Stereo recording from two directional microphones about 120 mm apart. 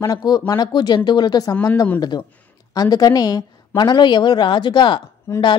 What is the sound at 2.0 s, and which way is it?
A woman's voice, 35° left (ahead or behind).